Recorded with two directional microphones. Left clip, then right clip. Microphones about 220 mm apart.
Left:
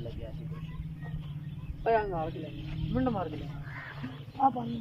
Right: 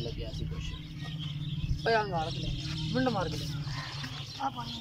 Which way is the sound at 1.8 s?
10° left (ahead or behind).